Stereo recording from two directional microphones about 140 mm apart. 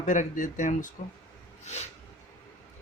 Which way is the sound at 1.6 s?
55° left (ahead or behind).